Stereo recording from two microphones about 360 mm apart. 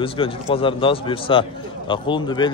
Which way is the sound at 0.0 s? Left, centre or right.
Centre.